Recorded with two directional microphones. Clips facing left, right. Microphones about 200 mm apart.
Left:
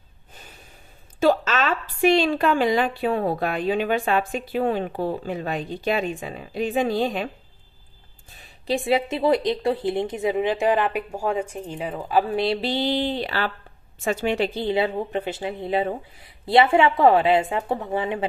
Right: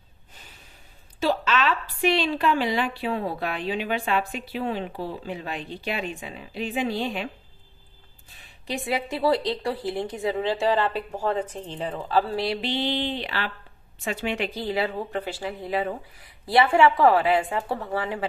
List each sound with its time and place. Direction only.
1.2 s a woman's voice: 45° left (ahead or behind)
8.6 s a woman's voice: 30° left (ahead or behind)
12.6 s a woman's voice: 40° left (ahead or behind); by 18.2 s 20° left (ahead or behind)